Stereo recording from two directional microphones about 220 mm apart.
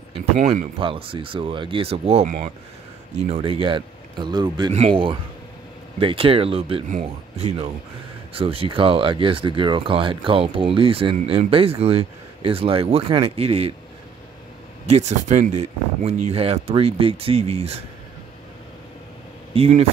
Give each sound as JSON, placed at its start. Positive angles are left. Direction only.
{"t": 0.2, "sound": "speech", "side_deg": -30}
{"t": 14.9, "sound": "speech", "side_deg": -30}
{"t": 19.5, "sound": "speech", "side_deg": -25}